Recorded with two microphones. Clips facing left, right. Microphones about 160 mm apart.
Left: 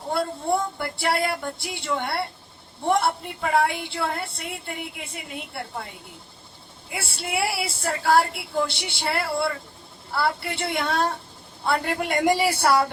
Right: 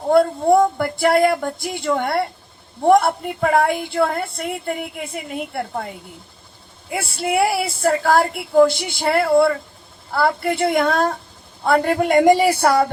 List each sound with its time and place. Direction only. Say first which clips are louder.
0.1 s a woman's voice: right 10 dB; 50° right (ahead or behind)
6.9 s a woman's voice: right 9 dB; 50° right (ahead or behind)